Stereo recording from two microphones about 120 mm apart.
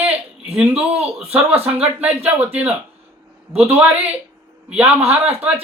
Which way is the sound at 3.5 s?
55° right (ahead or behind).